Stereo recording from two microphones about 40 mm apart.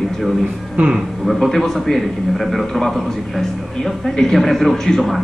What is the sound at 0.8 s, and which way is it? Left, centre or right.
Speech, right.